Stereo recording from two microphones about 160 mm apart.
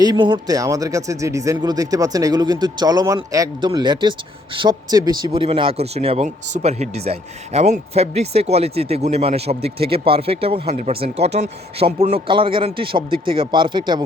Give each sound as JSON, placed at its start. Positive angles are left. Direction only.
{"t": 0.0, "sound": "speech", "side_deg": -25}